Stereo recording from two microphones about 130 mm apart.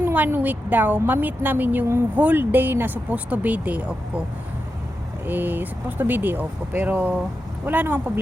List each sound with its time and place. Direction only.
0.0 s a woman's voice: 15° right (ahead or behind)
5.2 s a woman's voice: 15° right (ahead or behind)